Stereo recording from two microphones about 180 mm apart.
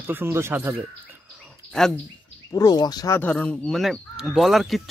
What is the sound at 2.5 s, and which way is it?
Speech, 20° left (ahead or behind).